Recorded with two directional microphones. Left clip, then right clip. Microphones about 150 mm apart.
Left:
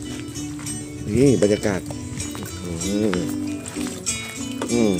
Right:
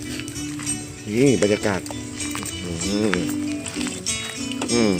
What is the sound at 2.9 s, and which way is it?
Speech, 5° left (ahead or behind).